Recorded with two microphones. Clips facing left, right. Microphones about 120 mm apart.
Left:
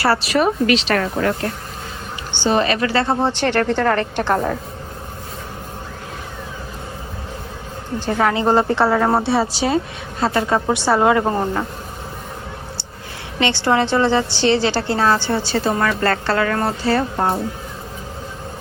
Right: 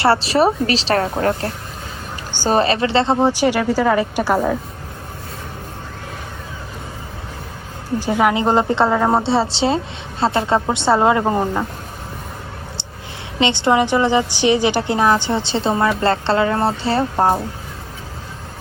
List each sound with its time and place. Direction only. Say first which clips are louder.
0.0 s a woman's voice: right 2 dB; 30° right (ahead or behind); by 4.5 s 5° right (ahead or behind)
7.9 s a woman's voice: right 2 dB; 10° right (ahead or behind)
9.0 s a woman's voice: right 1 dB; 10° right (ahead or behind)
9.2 s a woman's voice: right 1 dB; 25° right (ahead or behind)
11.2 s a woman's voice: right 1 dB; 10° right (ahead or behind)
13.4 s a woman's voice: right 2 dB; 20° right (ahead or behind)